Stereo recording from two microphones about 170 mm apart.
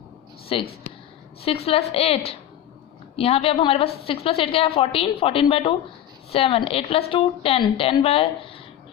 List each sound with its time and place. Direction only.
0.4 s a woman's voice: 35° left (ahead or behind)